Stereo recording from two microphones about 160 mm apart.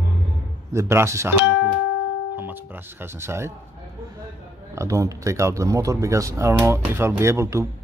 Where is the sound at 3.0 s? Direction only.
15° right (ahead or behind).